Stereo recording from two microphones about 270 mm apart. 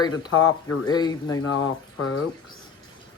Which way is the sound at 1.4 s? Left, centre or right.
Left.